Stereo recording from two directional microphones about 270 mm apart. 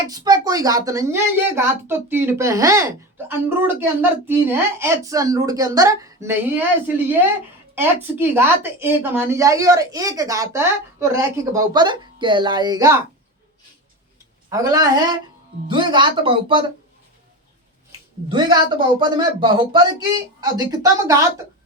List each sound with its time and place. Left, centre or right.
0.1 s a woman's voice: centre
14.5 s a woman's voice: centre
18.3 s a woman's voice: centre